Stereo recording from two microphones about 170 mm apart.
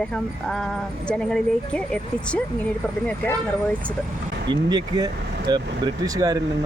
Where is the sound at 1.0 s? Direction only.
5° left (ahead or behind).